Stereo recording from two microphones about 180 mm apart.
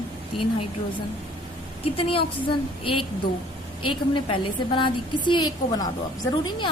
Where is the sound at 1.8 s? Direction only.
30° left (ahead or behind).